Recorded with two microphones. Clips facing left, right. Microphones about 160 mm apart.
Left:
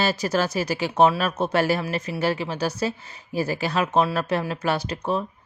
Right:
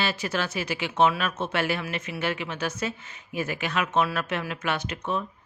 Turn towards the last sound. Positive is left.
turn(degrees=35)  # may be behind; listen again after turning